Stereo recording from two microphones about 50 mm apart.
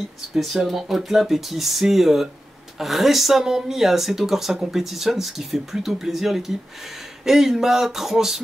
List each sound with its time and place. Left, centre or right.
0.3 s speech: centre